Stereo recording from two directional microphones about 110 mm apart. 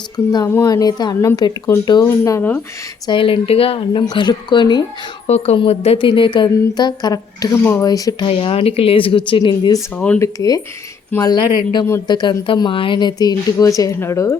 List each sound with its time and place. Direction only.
0.6 s speech: 35° left (ahead or behind)
3.1 s speech: 55° left (ahead or behind)
4.0 s speech: 40° left (ahead or behind)
5.2 s a woman's voice: 75° left (ahead or behind)
5.5 s speech: 65° left (ahead or behind); by 7.5 s 35° left (ahead or behind)
7.5 s speech: 25° left (ahead or behind)
8.2 s speech: 55° left (ahead or behind); by 10.6 s 30° left (ahead or behind)
11.2 s speech: 40° left (ahead or behind); by 14.3 s 25° left (ahead or behind)